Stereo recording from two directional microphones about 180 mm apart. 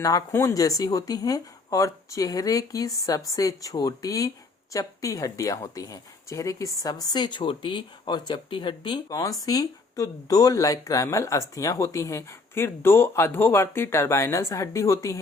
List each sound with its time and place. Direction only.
0.0 s speech: 20° left (ahead or behind)